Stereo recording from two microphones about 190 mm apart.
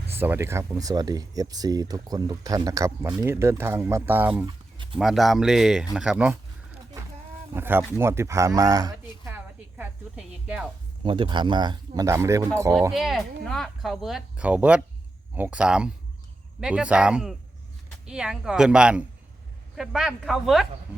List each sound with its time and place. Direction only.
0.2 s speech: 10° right (ahead or behind)
7.5 s speech: 10° right (ahead or behind)
11.0 s speech: 25° right (ahead or behind)
12.9 s speech: centre (ahead or behind)